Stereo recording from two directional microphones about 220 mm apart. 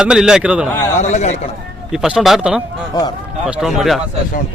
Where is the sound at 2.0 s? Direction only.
Centre (ahead or behind).